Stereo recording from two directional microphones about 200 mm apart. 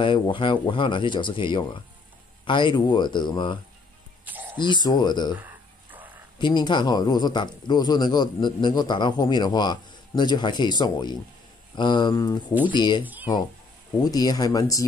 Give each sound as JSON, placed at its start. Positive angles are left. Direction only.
{"t": 0.0, "sound": "speech", "side_deg": 25}
{"t": 4.2, "sound": "a sound", "side_deg": -10}
{"t": 4.6, "sound": "speech", "side_deg": 20}
{"t": 6.3, "sound": "speech", "side_deg": 20}
{"t": 13.0, "sound": "speech", "side_deg": -10}
{"t": 14.0, "sound": "speech", "side_deg": 20}